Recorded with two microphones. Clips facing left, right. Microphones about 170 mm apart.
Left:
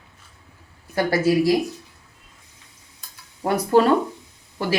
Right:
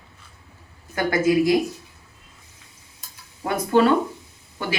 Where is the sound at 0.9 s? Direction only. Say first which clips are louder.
Even; 35° left (ahead or behind).